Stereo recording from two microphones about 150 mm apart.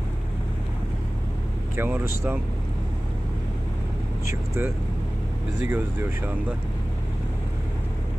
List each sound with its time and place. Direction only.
1.8 s speech: 15° right (ahead or behind)
4.3 s speech: 15° right (ahead or behind)